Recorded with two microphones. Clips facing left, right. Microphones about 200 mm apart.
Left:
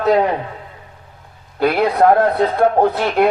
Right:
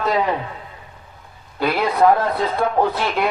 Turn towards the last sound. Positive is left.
turn(degrees=50)  # may be behind; listen again after turning